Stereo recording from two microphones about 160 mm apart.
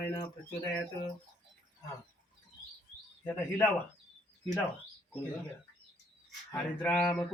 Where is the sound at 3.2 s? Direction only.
10° left (ahead or behind).